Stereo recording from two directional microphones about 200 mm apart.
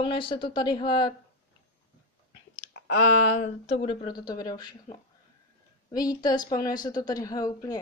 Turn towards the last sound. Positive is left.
turn(degrees=20)  # may be behind; listen again after turning